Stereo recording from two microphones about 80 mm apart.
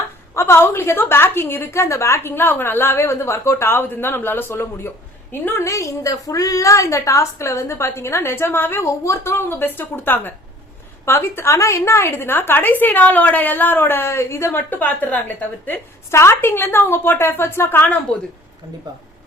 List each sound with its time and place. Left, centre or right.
0.3 s a woman's voice: left
5.6 s a woman's voice: left
16.1 s a woman's voice: left